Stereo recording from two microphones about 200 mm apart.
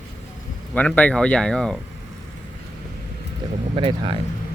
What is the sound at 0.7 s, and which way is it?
Speech, 5° left (ahead or behind).